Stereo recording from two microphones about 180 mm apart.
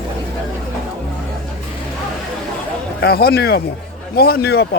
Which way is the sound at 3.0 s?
60° left (ahead or behind).